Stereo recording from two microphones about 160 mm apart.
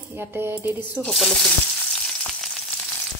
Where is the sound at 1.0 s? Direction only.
Centre (ahead or behind).